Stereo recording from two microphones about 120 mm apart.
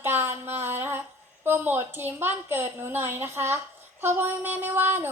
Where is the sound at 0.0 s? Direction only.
15° right (ahead or behind).